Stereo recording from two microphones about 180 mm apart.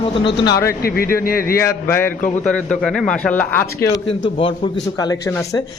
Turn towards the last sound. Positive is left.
turn(degrees=15)  # may be behind; listen again after turning